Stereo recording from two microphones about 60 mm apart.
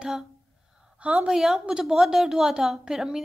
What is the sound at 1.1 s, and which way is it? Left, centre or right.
A woman's voice, centre.